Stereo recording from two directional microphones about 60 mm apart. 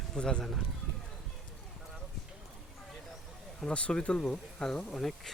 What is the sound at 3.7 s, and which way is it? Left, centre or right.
Speech, centre.